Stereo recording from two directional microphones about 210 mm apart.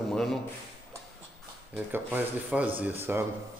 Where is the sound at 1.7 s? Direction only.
10° right (ahead or behind).